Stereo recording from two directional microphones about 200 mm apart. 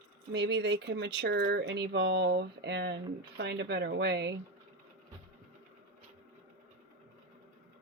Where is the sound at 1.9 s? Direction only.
65° right (ahead or behind).